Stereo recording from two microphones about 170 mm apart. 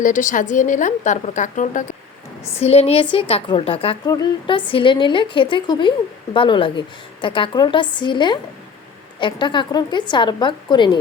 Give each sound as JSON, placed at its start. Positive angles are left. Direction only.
{"t": 0.0, "sound": "a woman's voice", "side_deg": 50}